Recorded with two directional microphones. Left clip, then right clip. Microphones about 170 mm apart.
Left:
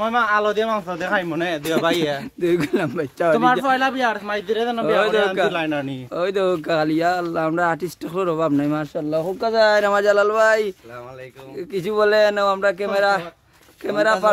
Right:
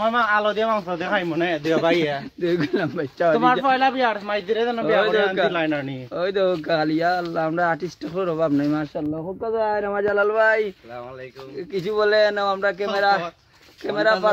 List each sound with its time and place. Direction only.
0.0 s speech: 10° left (ahead or behind)
2.4 s speech: 25° left (ahead or behind)
3.6 s a man's voice: 5° left (ahead or behind)
6.1 s speech: 35° left (ahead or behind)
9.4 s speech: 55° left (ahead or behind)
11.7 s speech: 30° left (ahead or behind)